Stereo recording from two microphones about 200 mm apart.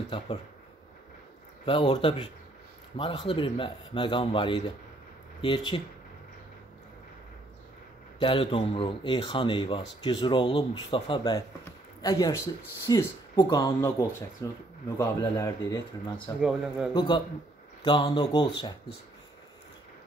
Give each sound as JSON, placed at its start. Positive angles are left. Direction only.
{"t": 1.7, "sound": "speech", "side_deg": 25}
{"t": 8.2, "sound": "speech", "side_deg": 25}
{"t": 16.3, "sound": "a man's voice", "side_deg": -5}
{"t": 16.9, "sound": "speech", "side_deg": 25}